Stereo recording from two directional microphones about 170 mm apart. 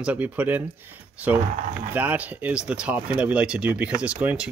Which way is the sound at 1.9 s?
10° right (ahead or behind).